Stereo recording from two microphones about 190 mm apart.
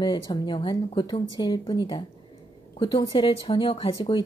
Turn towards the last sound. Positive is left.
turn(degrees=30)  # may be behind; listen again after turning